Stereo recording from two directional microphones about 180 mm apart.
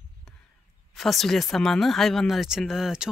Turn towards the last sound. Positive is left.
turn(degrees=-5)  # may be behind; listen again after turning